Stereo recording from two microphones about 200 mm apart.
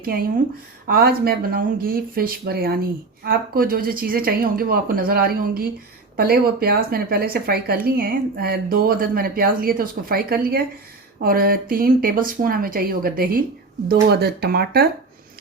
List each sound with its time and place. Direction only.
0.0 s speech: 45° right (ahead or behind)